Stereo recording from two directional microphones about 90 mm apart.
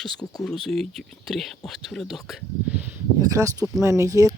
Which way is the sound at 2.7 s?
20° right (ahead or behind).